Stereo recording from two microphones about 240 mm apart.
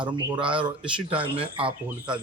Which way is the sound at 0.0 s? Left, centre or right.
Centre.